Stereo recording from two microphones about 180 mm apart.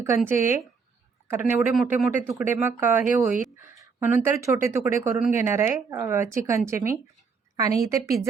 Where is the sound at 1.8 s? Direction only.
10° right (ahead or behind).